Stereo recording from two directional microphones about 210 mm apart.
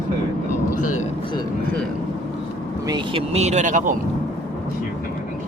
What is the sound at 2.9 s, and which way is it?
Speech, 30° right (ahead or behind).